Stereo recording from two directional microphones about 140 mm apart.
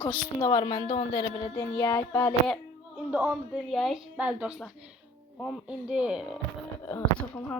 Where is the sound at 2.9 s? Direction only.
15° right (ahead or behind).